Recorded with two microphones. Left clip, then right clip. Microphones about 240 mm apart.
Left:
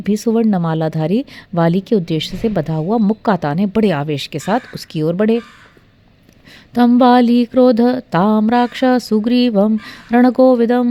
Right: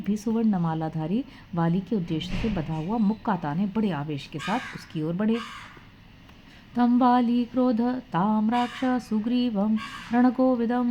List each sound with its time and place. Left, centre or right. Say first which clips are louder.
0.0 s a woman's voice: left 12 dB; left
6.7 s a woman's voice: left 11 dB; left